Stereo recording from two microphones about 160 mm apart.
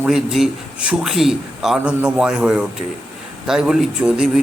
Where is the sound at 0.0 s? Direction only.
5° right (ahead or behind).